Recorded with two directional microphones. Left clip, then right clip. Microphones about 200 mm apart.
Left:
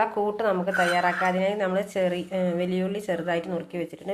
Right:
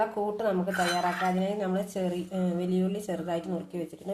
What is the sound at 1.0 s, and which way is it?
Speech, 35° left (ahead or behind).